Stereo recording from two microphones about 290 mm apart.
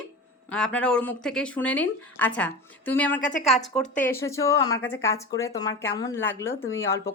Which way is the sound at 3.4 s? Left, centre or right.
Centre.